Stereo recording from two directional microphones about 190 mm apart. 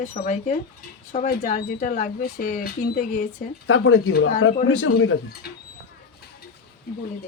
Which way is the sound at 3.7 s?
90° left.